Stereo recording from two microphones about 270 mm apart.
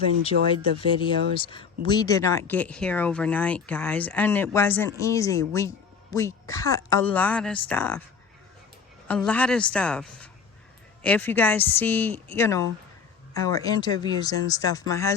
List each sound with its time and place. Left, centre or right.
0.3 s speech: right
1.0 s speech: centre
9.0 s a woman's voice: centre